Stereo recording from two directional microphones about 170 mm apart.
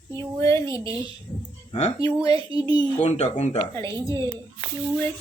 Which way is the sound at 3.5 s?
20° left (ahead or behind).